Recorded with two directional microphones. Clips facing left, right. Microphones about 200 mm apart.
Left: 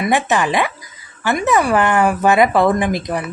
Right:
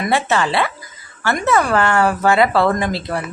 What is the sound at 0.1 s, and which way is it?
Speech, 15° left (ahead or behind).